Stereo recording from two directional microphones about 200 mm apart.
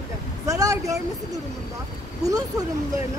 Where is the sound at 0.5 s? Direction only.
15° right (ahead or behind).